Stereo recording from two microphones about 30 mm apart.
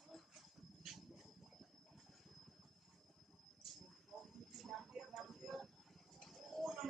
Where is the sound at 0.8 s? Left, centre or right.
Centre.